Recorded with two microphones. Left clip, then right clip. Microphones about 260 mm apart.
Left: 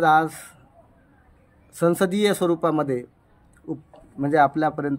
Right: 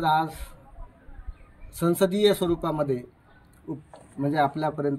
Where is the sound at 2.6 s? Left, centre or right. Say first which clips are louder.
Left 4 dB; left.